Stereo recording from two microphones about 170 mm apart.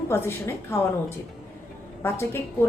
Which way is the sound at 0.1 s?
15° left (ahead or behind).